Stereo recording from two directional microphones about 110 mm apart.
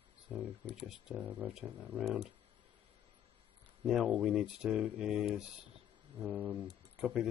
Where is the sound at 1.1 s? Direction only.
15° right (ahead or behind).